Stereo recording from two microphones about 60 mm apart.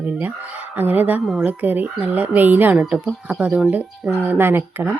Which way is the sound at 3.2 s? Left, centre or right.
Centre.